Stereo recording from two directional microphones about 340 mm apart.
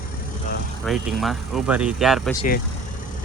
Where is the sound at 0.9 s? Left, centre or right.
Centre.